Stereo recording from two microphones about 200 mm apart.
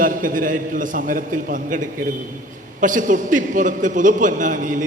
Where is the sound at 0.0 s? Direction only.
45° right (ahead or behind).